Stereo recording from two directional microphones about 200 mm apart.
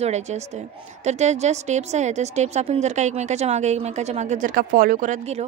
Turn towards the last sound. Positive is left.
turn(degrees=-35)  # may be behind; listen again after turning